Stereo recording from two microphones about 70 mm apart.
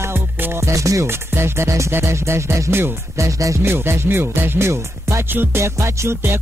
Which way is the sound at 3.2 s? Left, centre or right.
Right.